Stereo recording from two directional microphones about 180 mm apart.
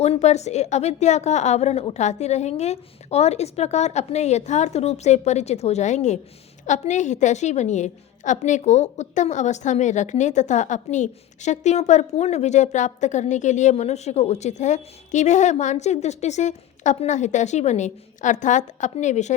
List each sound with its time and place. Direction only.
0.0 s a woman's voice: 35° left (ahead or behind)